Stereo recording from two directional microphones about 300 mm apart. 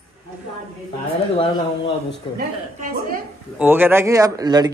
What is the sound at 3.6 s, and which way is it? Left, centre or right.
A man's voice, centre.